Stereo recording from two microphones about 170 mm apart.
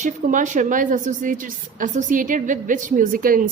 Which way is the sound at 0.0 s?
50° right (ahead or behind).